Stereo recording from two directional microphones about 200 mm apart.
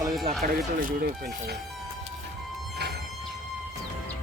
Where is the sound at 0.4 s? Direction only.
45° right (ahead or behind).